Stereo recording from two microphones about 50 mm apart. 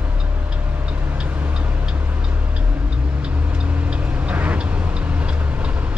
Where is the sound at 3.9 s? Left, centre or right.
Right.